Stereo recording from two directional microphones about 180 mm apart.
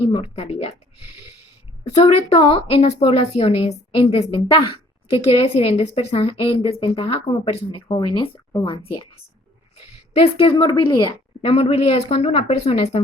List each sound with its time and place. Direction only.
0.1 s a woman's voice: 30° left (ahead or behind)
2.0 s a woman's voice: 30° left (ahead or behind)
10.2 s a woman's voice: 30° left (ahead or behind)